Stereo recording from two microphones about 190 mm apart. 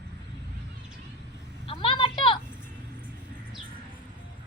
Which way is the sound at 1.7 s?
25° left (ahead or behind).